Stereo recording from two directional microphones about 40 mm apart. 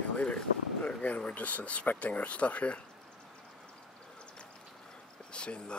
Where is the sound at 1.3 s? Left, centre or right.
Left.